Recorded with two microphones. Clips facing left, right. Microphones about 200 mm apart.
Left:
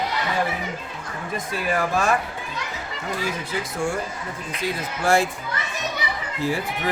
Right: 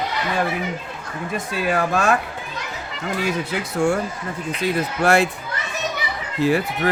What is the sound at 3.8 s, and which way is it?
Speech, 65° right (ahead or behind).